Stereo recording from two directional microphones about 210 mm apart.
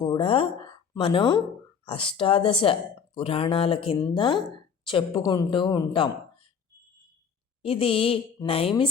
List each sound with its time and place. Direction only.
0.0 s a woman's voice: 25° left (ahead or behind)
7.6 s speech: 25° left (ahead or behind)